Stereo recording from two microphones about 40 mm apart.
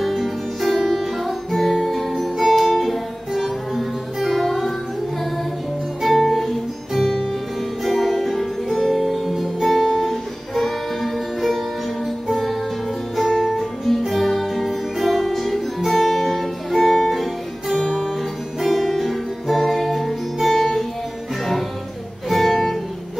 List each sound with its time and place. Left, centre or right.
0.0 s music: centre
6.0 s music: centre
8.7 s music: centre
9.1 s music: centre
22.3 s music: centre